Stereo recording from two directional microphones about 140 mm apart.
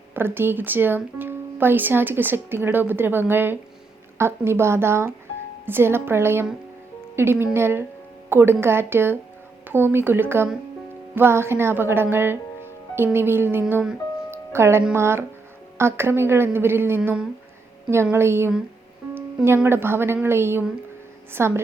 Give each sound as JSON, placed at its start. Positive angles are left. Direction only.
{"t": 0.1, "sound": "speech", "side_deg": -15}
{"t": 14.3, "sound": "music", "side_deg": -20}
{"t": 14.9, "sound": "speech", "side_deg": -20}